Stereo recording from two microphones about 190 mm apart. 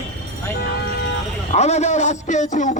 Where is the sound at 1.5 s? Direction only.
35° left (ahead or behind).